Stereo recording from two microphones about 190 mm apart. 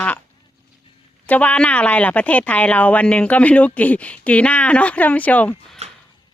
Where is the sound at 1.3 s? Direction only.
5° left (ahead or behind).